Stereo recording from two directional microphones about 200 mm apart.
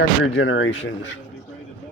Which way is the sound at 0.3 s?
70° left (ahead or behind).